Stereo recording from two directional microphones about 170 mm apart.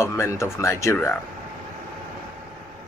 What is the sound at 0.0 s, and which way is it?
Speech, 15° left (ahead or behind).